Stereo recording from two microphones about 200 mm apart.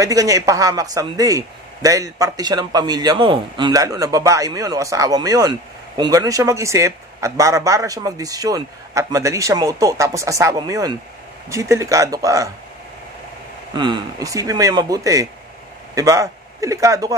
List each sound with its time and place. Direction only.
0.0 s a man's voice: 15° right (ahead or behind)
13.7 s a man's voice: 20° right (ahead or behind)